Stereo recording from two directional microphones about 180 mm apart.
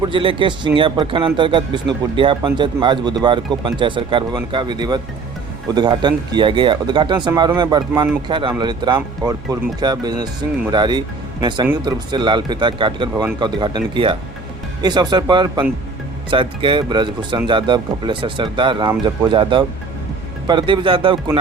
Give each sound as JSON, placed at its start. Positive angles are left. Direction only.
{"t": 0.0, "sound": "a man's voice", "side_deg": -30}